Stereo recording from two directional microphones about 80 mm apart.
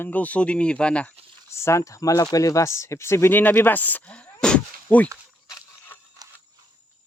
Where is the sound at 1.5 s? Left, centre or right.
Left; by 4.2 s centre.